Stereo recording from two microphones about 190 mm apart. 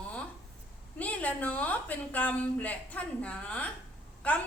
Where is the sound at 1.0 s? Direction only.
10° left (ahead or behind).